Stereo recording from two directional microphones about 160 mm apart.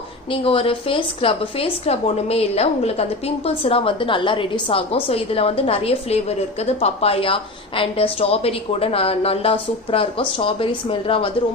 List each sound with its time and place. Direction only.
0.3 s a woman's voice: 35° left (ahead or behind)